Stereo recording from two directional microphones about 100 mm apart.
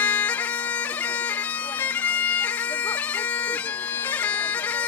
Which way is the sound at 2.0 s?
15° left (ahead or behind).